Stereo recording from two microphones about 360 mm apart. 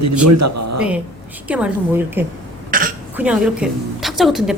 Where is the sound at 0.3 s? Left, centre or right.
Right.